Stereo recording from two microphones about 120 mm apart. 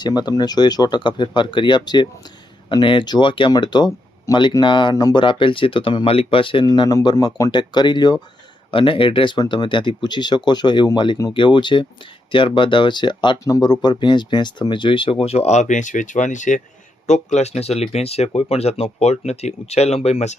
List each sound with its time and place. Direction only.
0.0 s speech: 35° left (ahead or behind); by 16.6 s 90° left
17.1 s speech: 70° left (ahead or behind)